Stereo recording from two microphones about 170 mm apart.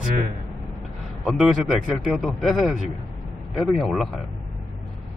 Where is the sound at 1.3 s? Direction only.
Centre (ahead or behind).